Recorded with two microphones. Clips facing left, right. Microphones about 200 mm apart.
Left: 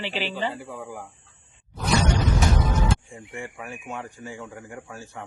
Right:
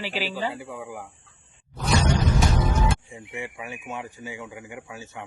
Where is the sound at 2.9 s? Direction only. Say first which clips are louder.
Left 2 dB; 5° right (ahead or behind).